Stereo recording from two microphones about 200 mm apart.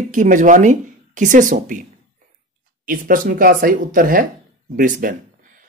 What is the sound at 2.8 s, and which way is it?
Speech, 45° right (ahead or behind).